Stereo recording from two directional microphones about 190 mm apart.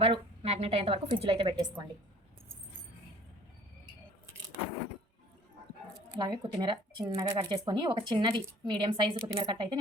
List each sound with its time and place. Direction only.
0.0 s a woman's voice: 30° right (ahead or behind)
6.1 s speech: 25° right (ahead or behind)